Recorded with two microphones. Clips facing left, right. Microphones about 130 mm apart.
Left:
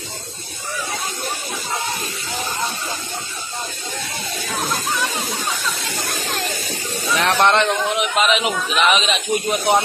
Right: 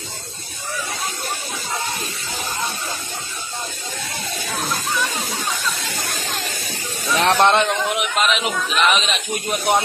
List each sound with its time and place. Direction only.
4.6 s a sound: 15° left (ahead or behind)
7.2 s snake: 20° right (ahead or behind)
7.8 s speech: centre (ahead or behind)